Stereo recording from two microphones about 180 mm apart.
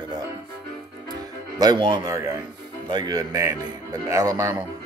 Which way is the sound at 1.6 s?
20° right (ahead or behind).